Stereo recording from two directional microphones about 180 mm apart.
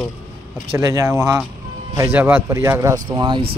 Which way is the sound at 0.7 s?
15° right (ahead or behind).